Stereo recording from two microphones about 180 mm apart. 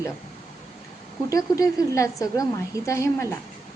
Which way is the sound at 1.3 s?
20° left (ahead or behind).